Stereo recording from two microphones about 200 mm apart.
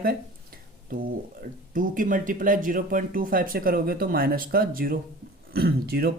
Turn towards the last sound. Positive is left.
turn(degrees=-50)  # may be behind; listen again after turning